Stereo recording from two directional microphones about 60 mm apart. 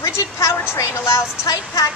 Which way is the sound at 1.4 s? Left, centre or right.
Left.